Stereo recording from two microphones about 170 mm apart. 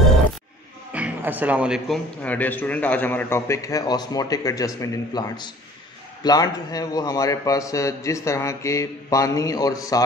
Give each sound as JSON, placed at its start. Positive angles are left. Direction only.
{"t": 0.9, "sound": "speech", "side_deg": -10}
{"t": 2.2, "sound": "a man's voice", "side_deg": 10}